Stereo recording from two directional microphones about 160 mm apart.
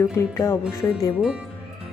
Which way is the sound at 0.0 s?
15° left (ahead or behind).